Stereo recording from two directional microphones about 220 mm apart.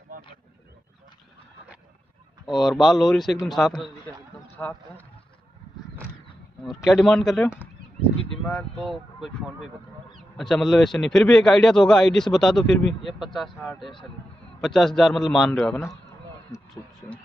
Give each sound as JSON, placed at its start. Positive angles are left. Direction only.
{"t": 0.1, "sound": "wild animals", "side_deg": -40}
{"t": 2.4, "sound": "a man's voice", "side_deg": 0}
{"t": 6.6, "sound": "a man's voice", "side_deg": 0}
{"t": 8.9, "sound": "a man's voice", "side_deg": 0}